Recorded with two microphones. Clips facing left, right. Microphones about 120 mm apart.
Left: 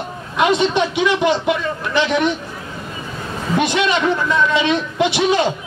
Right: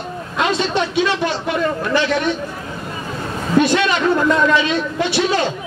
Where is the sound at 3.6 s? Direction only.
20° left (ahead or behind).